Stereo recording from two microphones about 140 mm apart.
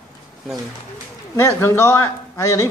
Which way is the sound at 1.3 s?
20° left (ahead or behind).